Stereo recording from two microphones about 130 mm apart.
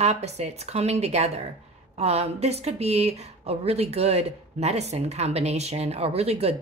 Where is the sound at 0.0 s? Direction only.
55° right (ahead or behind).